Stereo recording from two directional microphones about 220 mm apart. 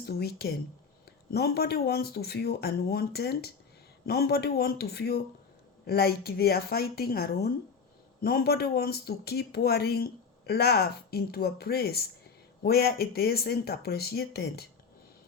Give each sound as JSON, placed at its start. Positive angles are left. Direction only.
{"t": 0.0, "sound": "speech", "side_deg": 45}